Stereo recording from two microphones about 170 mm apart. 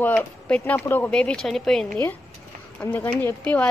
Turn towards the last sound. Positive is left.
turn(degrees=10)  # may be behind; listen again after turning